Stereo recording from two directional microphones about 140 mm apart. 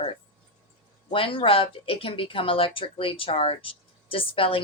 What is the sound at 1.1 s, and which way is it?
Speech, 40° left (ahead or behind).